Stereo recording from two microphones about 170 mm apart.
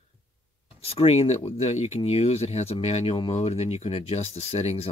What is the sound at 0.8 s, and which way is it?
Speech, 35° left (ahead or behind).